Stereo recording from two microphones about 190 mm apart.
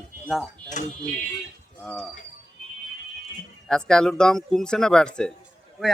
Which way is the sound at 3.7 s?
5° left (ahead or behind).